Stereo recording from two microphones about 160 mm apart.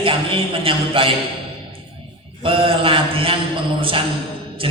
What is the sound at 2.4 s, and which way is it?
Speech, 35° right (ahead or behind).